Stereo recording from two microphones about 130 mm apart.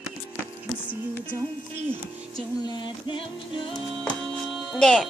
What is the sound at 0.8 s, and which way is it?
Music, 15° left (ahead or behind).